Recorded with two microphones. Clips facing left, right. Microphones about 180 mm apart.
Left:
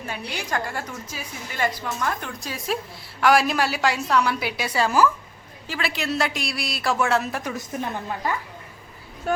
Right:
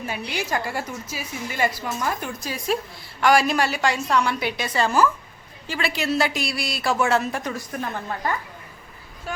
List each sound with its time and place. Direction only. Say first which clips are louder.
0.0 s a woman's voice: right 3 dB; 10° right (ahead or behind)
7.5 s a woman's voice: even; 15° left (ahead or behind)
9.3 s speech: left 8 dB; 50° left (ahead or behind)